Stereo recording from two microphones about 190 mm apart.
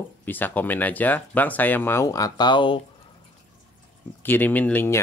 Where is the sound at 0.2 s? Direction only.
10° left (ahead or behind); by 2.8 s 25° left (ahead or behind).